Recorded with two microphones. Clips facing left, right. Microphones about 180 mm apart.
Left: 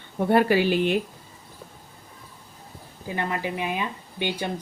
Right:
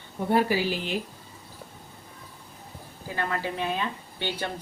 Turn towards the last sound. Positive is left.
turn(degrees=15)  # may be behind; listen again after turning